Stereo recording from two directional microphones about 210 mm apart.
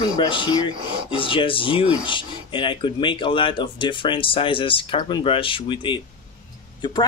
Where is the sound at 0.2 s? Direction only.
20° left (ahead or behind).